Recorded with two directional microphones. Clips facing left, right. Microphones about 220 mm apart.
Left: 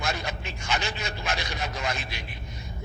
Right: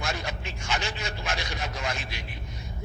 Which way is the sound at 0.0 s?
65° left (ahead or behind).